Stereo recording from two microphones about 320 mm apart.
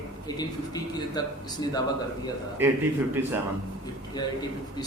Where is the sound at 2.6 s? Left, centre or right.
Centre.